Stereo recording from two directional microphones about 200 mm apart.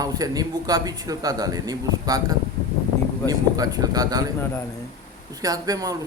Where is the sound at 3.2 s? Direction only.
20° right (ahead or behind).